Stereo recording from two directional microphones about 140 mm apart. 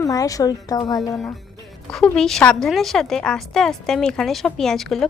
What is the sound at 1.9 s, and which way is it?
A woman's voice, 5° left (ahead or behind).